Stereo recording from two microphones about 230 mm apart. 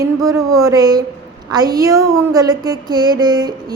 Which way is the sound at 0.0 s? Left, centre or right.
Centre.